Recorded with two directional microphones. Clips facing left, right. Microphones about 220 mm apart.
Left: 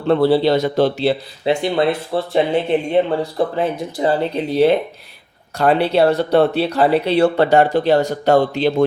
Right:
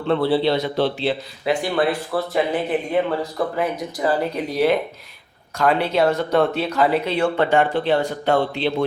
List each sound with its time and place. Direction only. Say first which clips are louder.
0.1 s speech: left 5 dB; 40° left (ahead or behind)
1.5 s speech: left 3 dB; 25° left (ahead or behind); by 8.7 s 40° left (ahead or behind)